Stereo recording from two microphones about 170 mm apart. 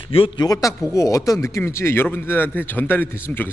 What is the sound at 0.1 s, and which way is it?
Speech, 35° left (ahead or behind).